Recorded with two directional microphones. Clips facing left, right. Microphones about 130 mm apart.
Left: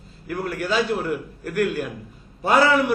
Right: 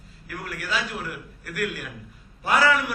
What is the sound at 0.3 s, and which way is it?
A man's voice, 30° left (ahead or behind).